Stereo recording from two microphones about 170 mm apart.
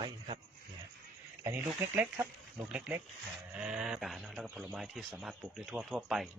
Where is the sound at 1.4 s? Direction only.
10° right (ahead or behind).